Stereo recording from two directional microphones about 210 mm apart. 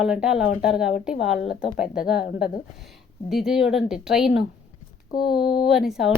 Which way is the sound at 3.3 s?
Centre (ahead or behind).